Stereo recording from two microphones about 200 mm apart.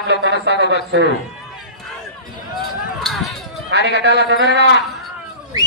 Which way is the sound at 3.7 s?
55° right (ahead or behind).